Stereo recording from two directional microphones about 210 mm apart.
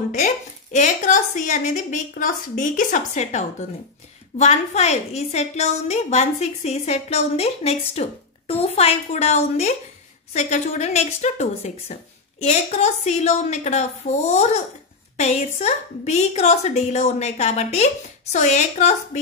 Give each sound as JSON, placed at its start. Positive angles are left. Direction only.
{"t": 0.1, "sound": "a woman's voice", "side_deg": 35}